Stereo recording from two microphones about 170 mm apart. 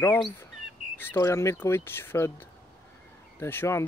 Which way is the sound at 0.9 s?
15° left (ahead or behind).